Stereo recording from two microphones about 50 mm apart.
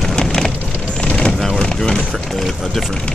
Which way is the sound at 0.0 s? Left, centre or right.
Centre.